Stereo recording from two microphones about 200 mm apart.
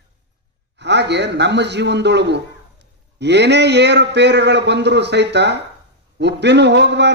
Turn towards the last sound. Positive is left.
turn(degrees=-60)  # may be behind; listen again after turning